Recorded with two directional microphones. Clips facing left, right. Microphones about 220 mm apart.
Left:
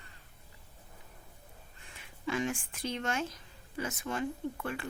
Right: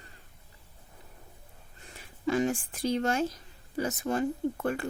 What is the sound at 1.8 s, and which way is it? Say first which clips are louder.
Speech: right 7 dB; 40° right (ahead or behind).